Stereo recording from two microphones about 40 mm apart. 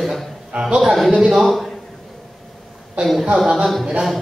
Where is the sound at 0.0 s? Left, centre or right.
Centre.